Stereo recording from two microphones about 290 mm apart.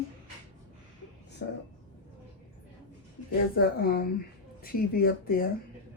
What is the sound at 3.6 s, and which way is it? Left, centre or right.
Speech, left.